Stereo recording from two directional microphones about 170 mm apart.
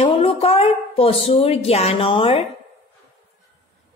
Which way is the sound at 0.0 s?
35° left (ahead or behind).